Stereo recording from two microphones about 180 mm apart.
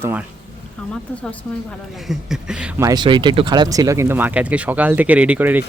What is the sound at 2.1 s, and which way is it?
Speech, 5° right (ahead or behind).